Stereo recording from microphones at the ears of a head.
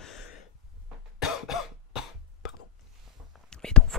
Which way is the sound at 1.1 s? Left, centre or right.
Left.